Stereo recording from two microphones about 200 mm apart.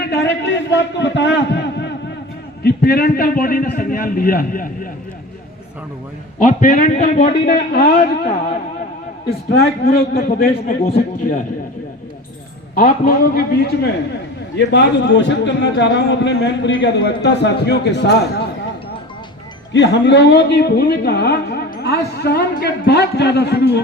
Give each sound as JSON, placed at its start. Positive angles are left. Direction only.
{"t": 0.0, "sound": "a man's voice", "side_deg": 55}
{"t": 6.4, "sound": "a man's voice", "side_deg": 40}
{"t": 7.4, "sound": "a woman's voice", "side_deg": 55}
{"t": 9.2, "sound": "a man's voice", "side_deg": 50}
{"t": 12.7, "sound": "a man's voice", "side_deg": 45}
{"t": 19.7, "sound": "a woman's voice", "side_deg": 60}